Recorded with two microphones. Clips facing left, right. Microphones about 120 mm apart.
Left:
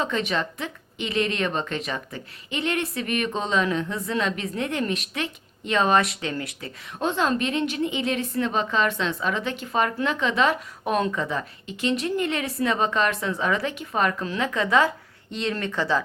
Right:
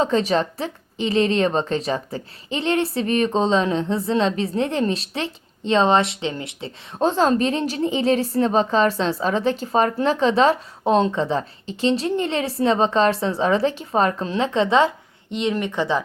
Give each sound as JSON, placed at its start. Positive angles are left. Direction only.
{"t": 0.0, "sound": "a woman's voice", "side_deg": -35}